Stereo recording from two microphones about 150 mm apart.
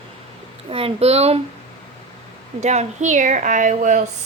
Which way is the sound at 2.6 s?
50° right (ahead or behind).